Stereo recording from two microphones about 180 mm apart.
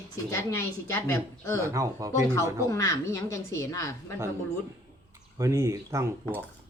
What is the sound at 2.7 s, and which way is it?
Speech, 15° left (ahead or behind).